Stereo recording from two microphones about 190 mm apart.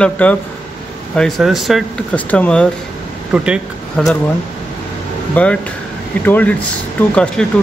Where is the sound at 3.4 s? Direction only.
5° right (ahead or behind).